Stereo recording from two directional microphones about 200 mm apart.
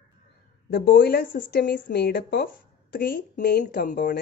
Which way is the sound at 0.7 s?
55° left (ahead or behind).